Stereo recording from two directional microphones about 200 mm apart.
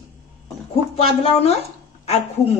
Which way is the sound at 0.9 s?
30° left (ahead or behind).